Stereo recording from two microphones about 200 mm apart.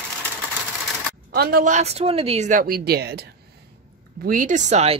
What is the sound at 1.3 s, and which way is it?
Speech, 50° right (ahead or behind).